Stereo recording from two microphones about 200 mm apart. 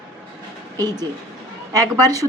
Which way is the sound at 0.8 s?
20° right (ahead or behind).